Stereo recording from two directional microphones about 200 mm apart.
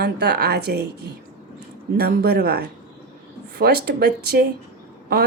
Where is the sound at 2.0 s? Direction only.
50° right (ahead or behind).